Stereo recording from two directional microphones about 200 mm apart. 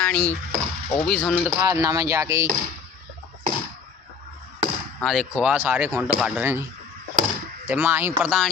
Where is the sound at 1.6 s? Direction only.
15° right (ahead or behind).